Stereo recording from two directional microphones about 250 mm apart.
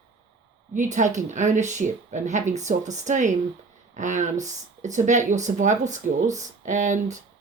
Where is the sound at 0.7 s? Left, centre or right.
Right.